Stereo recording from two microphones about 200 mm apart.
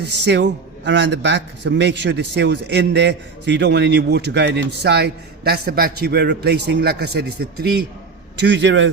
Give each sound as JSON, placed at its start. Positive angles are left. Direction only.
{"t": 0.3, "sound": "a man's voice", "side_deg": -60}